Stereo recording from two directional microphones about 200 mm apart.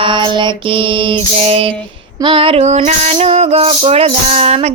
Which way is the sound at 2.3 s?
25° right (ahead or behind).